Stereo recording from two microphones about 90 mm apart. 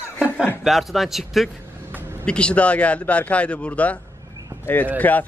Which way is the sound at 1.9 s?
25° right (ahead or behind).